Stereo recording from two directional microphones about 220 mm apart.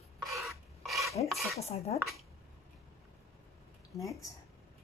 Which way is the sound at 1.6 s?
30° left (ahead or behind).